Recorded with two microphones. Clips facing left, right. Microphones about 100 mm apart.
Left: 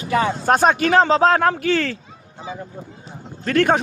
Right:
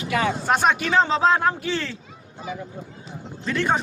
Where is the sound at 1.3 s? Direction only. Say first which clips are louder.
Left 5 dB; 65° left (ahead or behind).